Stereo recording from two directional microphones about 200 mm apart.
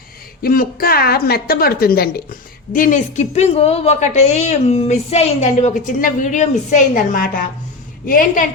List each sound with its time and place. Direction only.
0.4 s a woman's voice: 45° left (ahead or behind)